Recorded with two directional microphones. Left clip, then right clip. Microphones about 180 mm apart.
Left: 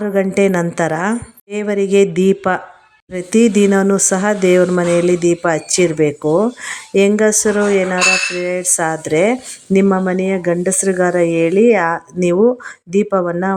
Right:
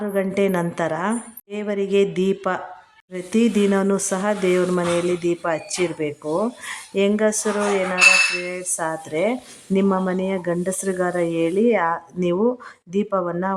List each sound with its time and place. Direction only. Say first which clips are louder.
0.0 s speech: left 7 dB; 25° left (ahead or behind)